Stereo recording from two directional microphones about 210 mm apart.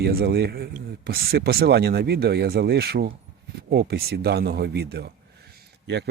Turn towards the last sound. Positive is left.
turn(degrees=-55)  # may be behind; listen again after turning